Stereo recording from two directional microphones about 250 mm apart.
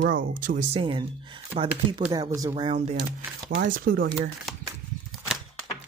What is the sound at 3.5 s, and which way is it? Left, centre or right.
Speech, right.